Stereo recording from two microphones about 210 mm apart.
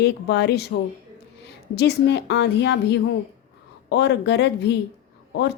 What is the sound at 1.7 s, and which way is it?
A woman's voice, 50° left (ahead or behind).